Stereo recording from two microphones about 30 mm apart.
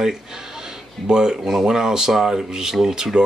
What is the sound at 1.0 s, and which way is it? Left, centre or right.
Speech, right.